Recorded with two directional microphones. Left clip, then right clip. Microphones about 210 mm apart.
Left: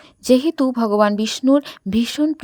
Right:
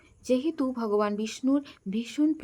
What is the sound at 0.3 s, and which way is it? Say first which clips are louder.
A woman's voice: left 11 dB; 45° left (ahead or behind).